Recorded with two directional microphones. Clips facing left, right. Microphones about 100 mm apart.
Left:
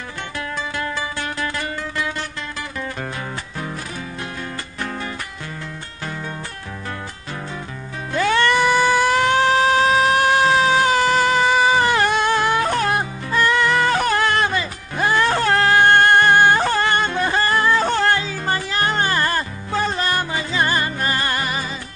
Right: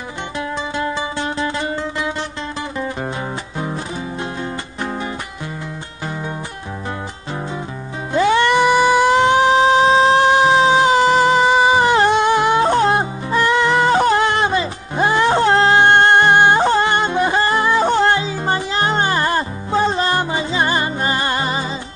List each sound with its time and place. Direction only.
0.7 s music: 20° right (ahead or behind)
8.1 s music: 20° right (ahead or behind)